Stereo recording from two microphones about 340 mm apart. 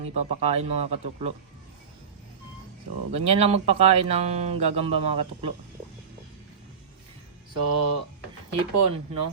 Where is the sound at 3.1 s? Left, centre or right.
Centre.